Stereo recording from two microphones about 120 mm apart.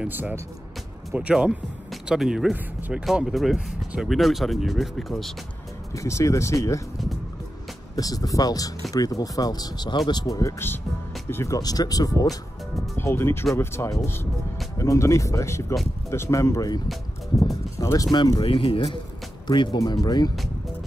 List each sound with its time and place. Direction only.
0.0 s speech: 15° right (ahead or behind); by 5.3 s centre (ahead or behind)
5.9 s speech: 25° left (ahead or behind)
7.9 s speech: 30° left (ahead or behind)